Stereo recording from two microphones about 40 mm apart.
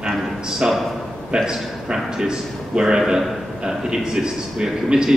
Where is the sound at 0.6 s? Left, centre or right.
Right.